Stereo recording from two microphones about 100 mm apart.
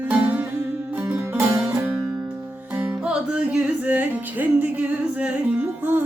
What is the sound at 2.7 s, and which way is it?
Music, 15° right (ahead or behind).